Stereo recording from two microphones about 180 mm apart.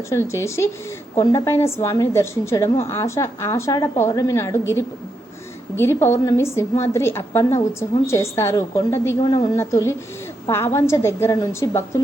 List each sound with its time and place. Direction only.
0.1 s a woman's voice: 15° left (ahead or behind)